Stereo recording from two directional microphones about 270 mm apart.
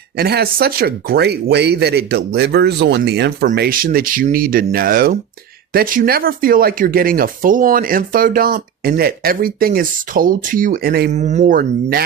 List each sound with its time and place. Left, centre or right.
0.2 s speech: right